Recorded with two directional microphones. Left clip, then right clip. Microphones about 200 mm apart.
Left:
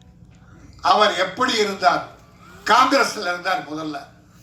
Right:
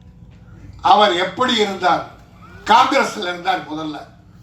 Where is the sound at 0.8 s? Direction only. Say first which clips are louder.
Right 4 dB; 55° left (ahead or behind).